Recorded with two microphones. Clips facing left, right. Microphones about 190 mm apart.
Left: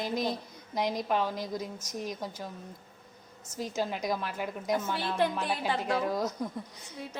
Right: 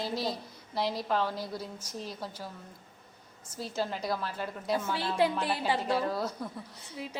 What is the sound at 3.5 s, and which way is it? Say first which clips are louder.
A woman's voice: left 1 dB; 10° left (ahead or behind).